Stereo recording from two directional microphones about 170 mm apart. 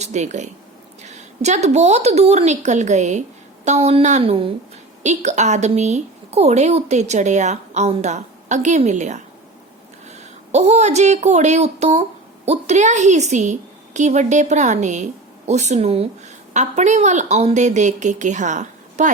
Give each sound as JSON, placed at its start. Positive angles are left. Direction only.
{"t": 0.0, "sound": "a woman's voice", "side_deg": -40}
{"t": 5.0, "sound": "a woman's voice", "side_deg": -45}